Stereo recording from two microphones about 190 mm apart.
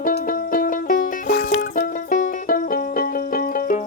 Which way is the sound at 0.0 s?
50° left (ahead or behind).